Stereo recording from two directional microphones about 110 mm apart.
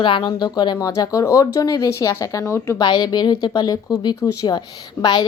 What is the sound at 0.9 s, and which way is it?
Speech, 30° left (ahead or behind).